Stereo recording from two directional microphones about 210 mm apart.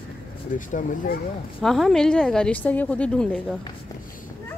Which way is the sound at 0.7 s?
35° left (ahead or behind).